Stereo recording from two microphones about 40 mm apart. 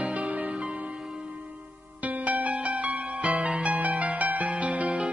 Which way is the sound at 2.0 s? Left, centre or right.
Right.